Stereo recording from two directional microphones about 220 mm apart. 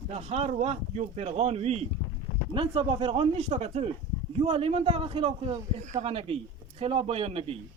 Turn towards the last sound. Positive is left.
turn(degrees=-25)  # may be behind; listen again after turning